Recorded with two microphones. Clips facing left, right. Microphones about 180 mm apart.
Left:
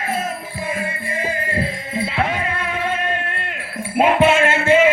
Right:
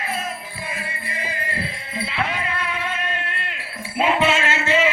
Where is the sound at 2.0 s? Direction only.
45° left (ahead or behind).